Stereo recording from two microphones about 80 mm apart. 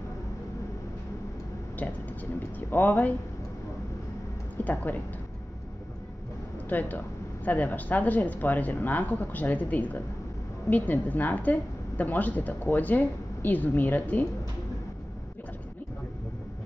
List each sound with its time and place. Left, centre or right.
2.7 s speech: left
4.6 s speech: left
6.7 s speech: left